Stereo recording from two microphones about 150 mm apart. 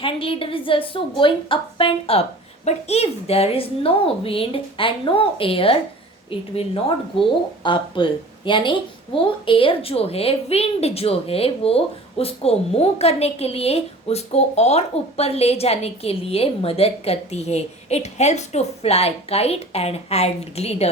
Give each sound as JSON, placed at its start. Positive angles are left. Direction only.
{"t": 0.0, "sound": "a woman's voice", "side_deg": 35}